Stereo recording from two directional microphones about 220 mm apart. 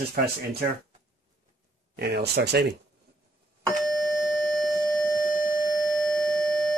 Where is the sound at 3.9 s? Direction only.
Centre (ahead or behind).